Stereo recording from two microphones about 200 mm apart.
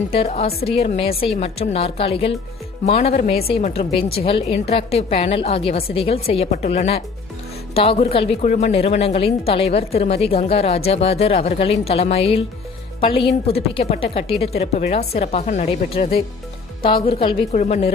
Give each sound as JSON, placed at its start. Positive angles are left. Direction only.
{"t": 0.1, "sound": "a woman's voice", "side_deg": 30}